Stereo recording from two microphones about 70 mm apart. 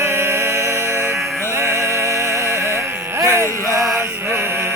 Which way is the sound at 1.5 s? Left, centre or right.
Right.